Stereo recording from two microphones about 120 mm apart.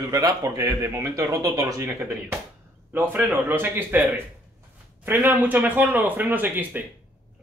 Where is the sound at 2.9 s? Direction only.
15° right (ahead or behind).